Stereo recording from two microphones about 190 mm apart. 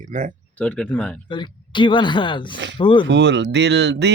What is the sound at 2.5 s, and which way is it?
Speech, 70° right (ahead or behind).